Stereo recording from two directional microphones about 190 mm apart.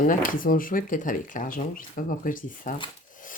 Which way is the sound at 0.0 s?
45° left (ahead or behind).